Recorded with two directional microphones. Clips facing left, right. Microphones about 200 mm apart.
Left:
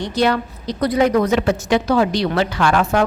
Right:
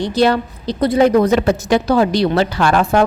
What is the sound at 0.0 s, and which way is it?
A woman's voice, 30° right (ahead or behind).